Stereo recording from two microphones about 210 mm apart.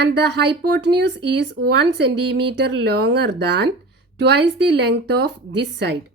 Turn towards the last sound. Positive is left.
turn(degrees=-55)  # may be behind; listen again after turning